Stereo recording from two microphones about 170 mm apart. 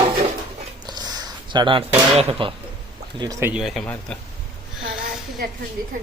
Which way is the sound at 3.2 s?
20° right (ahead or behind).